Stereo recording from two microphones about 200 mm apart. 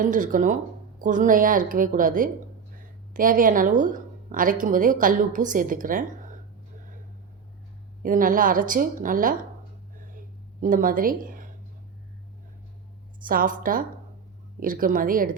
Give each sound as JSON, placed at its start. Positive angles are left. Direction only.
{"t": 0.0, "sound": "a woman's voice", "side_deg": -40}
{"t": 8.0, "sound": "a woman's voice", "side_deg": -45}
{"t": 10.0, "sound": "a sound", "side_deg": -45}
{"t": 13.2, "sound": "a woman's voice", "side_deg": -45}